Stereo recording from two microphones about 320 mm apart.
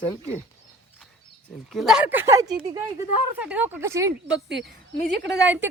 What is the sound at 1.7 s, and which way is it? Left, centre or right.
A woman's voice, centre.